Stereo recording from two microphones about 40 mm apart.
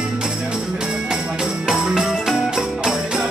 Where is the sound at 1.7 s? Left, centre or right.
Centre.